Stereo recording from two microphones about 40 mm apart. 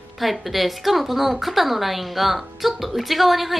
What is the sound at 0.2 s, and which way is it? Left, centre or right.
A woman's voice, centre.